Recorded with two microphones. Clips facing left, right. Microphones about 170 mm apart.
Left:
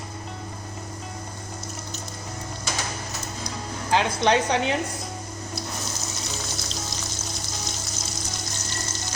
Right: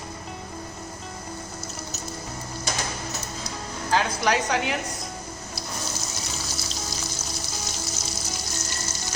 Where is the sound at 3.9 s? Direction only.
25° left (ahead or behind).